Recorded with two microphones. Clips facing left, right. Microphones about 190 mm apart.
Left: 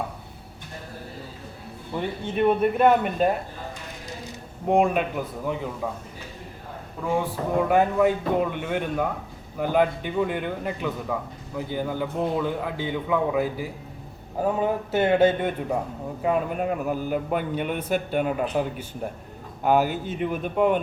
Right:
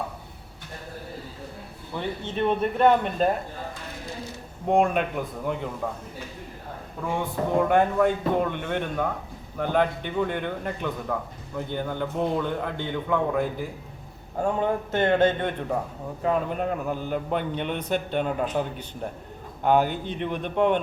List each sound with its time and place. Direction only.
2.0 s a man's voice: 10° left (ahead or behind)
4.7 s a man's voice: 5° left (ahead or behind)
7.0 s a man's voice: centre (ahead or behind)